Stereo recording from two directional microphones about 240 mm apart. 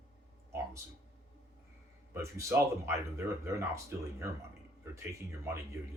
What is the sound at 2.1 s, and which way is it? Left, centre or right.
Speech, centre.